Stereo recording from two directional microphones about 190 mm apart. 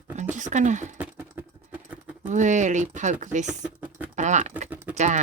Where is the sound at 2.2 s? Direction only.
40° right (ahead or behind).